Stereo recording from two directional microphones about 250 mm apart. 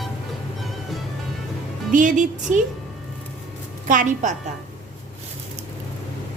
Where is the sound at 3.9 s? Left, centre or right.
Right.